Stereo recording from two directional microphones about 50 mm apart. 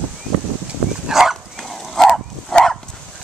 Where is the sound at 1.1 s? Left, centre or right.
Centre.